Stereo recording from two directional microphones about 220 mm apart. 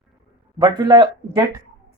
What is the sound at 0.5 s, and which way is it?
Speech, 20° right (ahead or behind).